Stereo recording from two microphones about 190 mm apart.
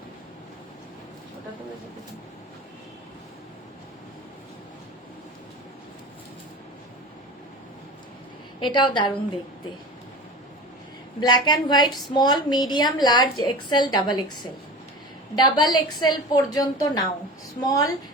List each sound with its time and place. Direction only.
8.6 s a woman's voice: 25° left (ahead or behind)
11.2 s a woman's voice: 25° left (ahead or behind)
15.4 s a woman's voice: 20° left (ahead or behind)